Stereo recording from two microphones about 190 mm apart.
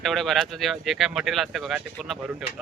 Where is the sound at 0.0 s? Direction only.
Centre (ahead or behind).